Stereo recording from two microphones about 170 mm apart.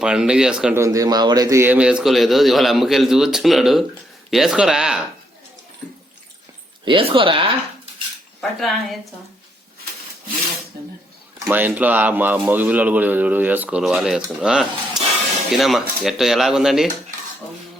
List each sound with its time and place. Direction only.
0.0 s a man's voice: 5° right (ahead or behind)
0.8 s a man's voice: 20° right (ahead or behind); by 4.9 s 5° right (ahead or behind)
6.8 s speech: 30° right (ahead or behind)
8.4 s a man's voice: centre (ahead or behind)
11.4 s speech: 10° right (ahead or behind)
15.0 s a sound: 5° right (ahead or behind)
15.5 s a man's voice: centre (ahead or behind)